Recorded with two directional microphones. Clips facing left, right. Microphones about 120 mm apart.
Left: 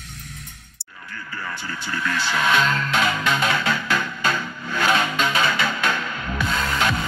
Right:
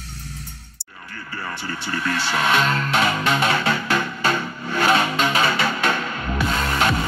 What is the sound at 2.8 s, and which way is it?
Music, 35° right (ahead or behind).